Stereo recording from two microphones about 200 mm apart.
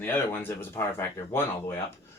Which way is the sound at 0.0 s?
10° left (ahead or behind).